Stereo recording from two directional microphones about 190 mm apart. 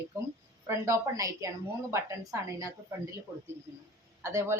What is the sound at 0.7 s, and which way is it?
A woman's voice, 15° right (ahead or behind).